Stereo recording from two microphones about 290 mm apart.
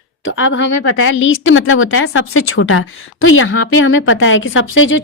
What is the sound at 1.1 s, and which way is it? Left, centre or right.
A woman's voice, left.